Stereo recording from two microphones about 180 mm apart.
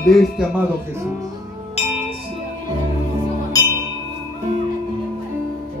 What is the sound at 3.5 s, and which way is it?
Music, 20° left (ahead or behind).